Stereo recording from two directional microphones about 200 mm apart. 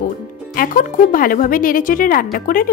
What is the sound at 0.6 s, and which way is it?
Speech, 45° left (ahead or behind).